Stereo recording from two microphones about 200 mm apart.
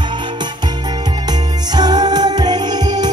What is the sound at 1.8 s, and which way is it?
Music, 20° right (ahead or behind).